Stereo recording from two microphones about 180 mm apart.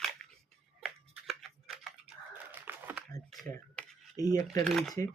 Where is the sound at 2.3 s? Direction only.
10° right (ahead or behind).